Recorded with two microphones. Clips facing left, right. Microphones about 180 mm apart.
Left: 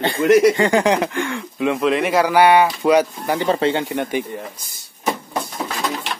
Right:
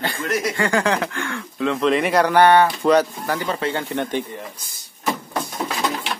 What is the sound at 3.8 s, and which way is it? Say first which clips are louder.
Speech: left 2 dB; 10° left (ahead or behind).